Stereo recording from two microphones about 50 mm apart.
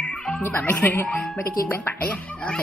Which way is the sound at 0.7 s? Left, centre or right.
Left.